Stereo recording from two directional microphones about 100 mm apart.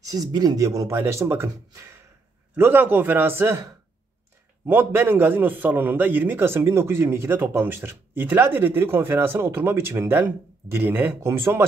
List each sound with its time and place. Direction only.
0.0 s a man's voice: 40° right (ahead or behind); by 3.5 s 20° right (ahead or behind)
4.6 s a man's voice: 20° right (ahead or behind)